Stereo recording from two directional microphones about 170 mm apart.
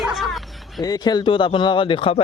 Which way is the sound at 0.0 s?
Centre (ahead or behind).